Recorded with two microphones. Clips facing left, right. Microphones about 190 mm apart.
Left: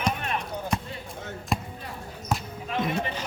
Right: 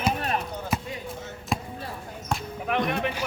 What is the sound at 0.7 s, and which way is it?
Basketball bounce, 5° right (ahead or behind).